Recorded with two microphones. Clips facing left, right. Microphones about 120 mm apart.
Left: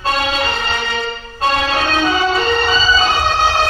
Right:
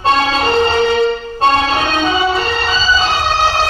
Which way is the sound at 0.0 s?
25° right (ahead or behind).